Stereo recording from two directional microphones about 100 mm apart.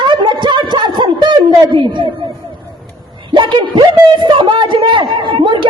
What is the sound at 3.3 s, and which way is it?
A man's voice, 55° right (ahead or behind).